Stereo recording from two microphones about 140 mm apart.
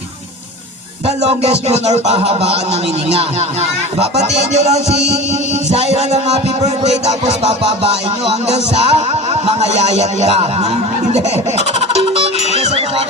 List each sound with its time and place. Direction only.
1.0 s music: 50° right (ahead or behind)
4.0 s music: 50° right (ahead or behind)